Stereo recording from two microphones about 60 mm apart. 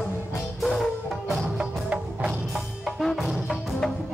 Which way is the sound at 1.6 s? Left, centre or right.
Centre.